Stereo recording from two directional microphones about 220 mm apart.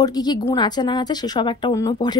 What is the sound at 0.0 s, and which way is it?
A woman's voice, 20° left (ahead or behind).